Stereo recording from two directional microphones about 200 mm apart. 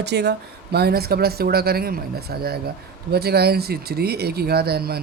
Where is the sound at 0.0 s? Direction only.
55° right (ahead or behind).